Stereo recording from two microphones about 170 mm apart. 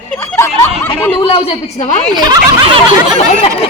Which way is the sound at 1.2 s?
35° left (ahead or behind).